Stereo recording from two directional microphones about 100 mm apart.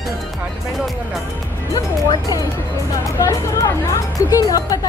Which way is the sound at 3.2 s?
35° left (ahead or behind).